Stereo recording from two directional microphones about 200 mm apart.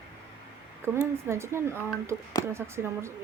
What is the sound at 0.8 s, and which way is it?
Speech, 10° right (ahead or behind).